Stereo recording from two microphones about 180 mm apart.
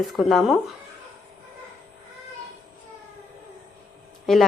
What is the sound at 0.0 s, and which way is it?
Speech, centre (ahead or behind).